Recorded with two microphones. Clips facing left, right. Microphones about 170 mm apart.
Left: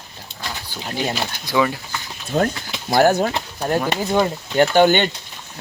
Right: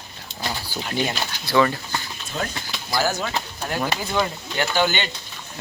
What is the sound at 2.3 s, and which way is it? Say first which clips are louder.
Speech: left 9 dB; 55° left (ahead or behind).